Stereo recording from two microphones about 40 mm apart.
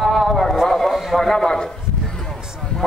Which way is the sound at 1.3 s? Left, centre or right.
Centre.